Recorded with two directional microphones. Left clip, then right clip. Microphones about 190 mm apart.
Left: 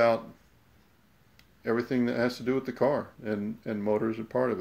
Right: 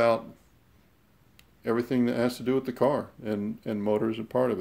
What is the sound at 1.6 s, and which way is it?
Speech, 10° right (ahead or behind).